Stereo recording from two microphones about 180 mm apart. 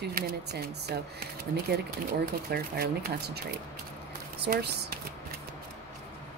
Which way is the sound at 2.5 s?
60° right (ahead or behind).